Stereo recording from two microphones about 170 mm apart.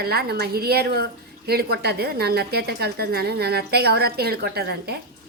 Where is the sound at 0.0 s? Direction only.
70° right (ahead or behind).